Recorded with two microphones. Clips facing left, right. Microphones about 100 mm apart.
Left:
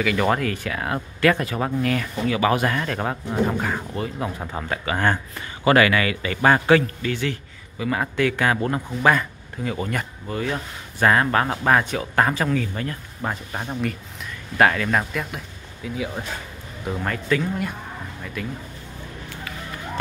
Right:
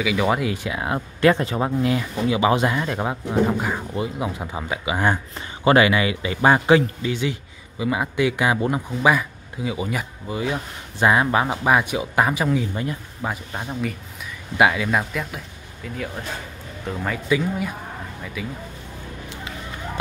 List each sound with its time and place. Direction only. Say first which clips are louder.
0.0 s a man's voice: even; 5° right (ahead or behind)
13.2 s speech: left 1 dB; centre (ahead or behind)